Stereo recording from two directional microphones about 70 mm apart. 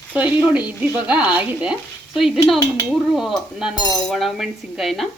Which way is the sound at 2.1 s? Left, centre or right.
Centre.